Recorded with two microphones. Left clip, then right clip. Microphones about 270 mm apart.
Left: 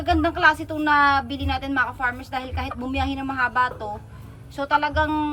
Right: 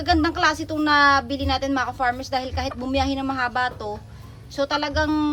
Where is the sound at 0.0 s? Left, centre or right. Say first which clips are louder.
Left 1 dB; centre.